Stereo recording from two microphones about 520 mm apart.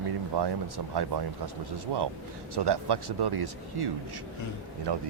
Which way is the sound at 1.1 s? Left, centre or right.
Right.